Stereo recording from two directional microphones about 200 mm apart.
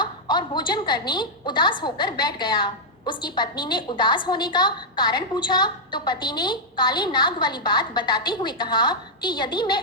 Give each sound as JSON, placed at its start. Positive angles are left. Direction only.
{"t": 0.0, "sound": "a woman's voice", "side_deg": 25}